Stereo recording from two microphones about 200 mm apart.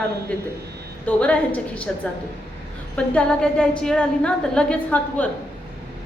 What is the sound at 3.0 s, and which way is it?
A woman's voice, 5° left (ahead or behind).